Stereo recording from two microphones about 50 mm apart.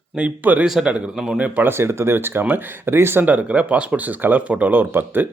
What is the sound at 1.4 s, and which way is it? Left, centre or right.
Speech, right.